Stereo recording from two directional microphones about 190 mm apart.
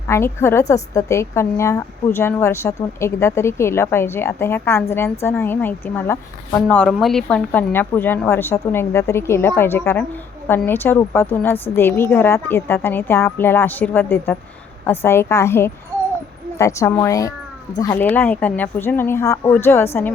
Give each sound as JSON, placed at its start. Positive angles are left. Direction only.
{"t": 0.1, "sound": "a woman's voice", "side_deg": 15}